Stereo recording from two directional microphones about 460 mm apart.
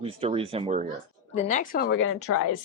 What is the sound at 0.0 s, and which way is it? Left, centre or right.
Speech, centre.